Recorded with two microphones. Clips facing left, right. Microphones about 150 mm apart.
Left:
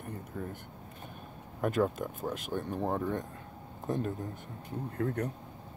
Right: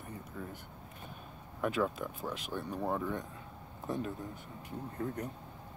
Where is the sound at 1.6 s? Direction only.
45° left (ahead or behind).